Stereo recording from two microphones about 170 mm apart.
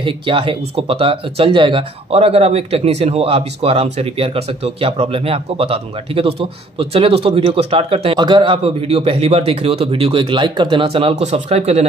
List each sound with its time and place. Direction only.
0.0 s speech: 30° right (ahead or behind)